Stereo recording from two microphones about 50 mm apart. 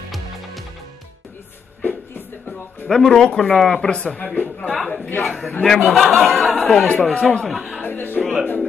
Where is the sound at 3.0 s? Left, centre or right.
Centre.